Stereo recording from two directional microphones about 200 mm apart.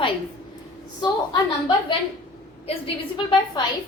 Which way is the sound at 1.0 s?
25° left (ahead or behind).